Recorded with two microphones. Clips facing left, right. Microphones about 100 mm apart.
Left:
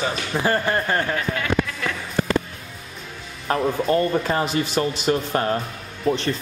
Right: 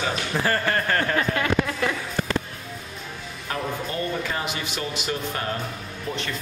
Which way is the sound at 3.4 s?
40° left (ahead or behind).